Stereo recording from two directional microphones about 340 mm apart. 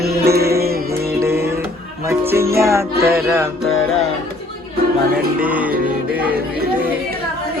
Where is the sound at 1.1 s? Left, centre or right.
Centre.